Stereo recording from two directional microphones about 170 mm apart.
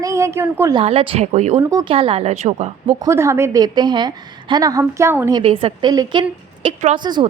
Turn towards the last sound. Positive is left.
turn(degrees=-25)  # may be behind; listen again after turning